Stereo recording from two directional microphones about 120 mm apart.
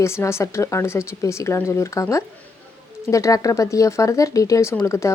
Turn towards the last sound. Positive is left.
turn(degrees=25)  # may be behind; listen again after turning